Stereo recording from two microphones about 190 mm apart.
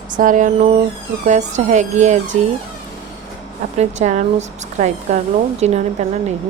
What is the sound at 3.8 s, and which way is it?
Speech, 40° right (ahead or behind).